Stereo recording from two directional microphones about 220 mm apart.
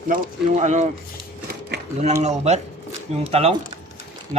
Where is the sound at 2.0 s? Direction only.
30° right (ahead or behind).